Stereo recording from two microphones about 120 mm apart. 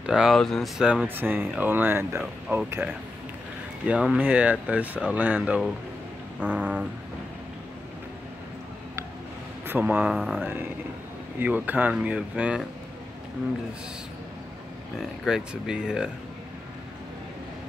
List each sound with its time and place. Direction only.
0.0 s speech: 5° right (ahead or behind)
1.0 s speech: 15° right (ahead or behind)
9.7 s speech: 15° right (ahead or behind)
10.1 s speech: centre (ahead or behind)
11.3 s speech: 15° right (ahead or behind)
15.0 s speech: 5° right (ahead or behind)